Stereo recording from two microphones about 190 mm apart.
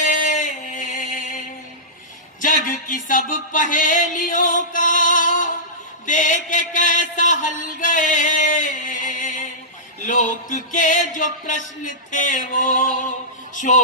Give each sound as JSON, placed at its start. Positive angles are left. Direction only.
{"t": 0.0, "sound": "music", "side_deg": 45}
{"t": 2.6, "sound": "music", "side_deg": 45}